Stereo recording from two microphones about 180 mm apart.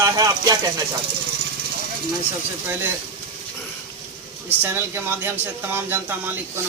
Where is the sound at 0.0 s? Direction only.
20° right (ahead or behind).